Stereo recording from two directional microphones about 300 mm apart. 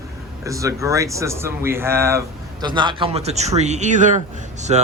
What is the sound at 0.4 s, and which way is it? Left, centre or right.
A man's voice, centre.